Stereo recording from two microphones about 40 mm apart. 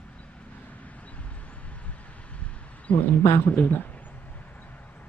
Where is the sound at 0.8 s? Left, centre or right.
Left.